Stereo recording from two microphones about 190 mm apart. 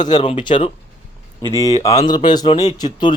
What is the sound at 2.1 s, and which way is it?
Speech, 20° left (ahead or behind).